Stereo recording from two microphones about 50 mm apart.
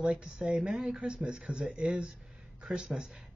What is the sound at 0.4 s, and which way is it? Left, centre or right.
Speech, centre.